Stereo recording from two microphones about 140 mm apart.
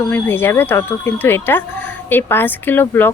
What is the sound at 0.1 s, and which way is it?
Speech, 15° left (ahead or behind).